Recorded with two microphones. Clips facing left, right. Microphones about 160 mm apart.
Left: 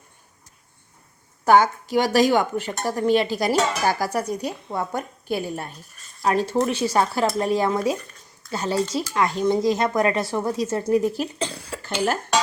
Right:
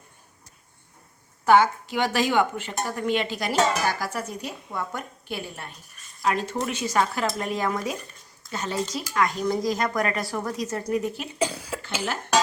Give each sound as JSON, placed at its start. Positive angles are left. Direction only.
{"t": 1.5, "sound": "a woman's voice", "side_deg": 40}
{"t": 11.3, "sound": "speech", "side_deg": -10}